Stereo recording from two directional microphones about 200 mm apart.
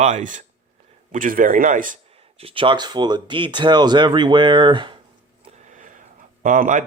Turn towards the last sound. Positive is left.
turn(degrees=-40)  # may be behind; listen again after turning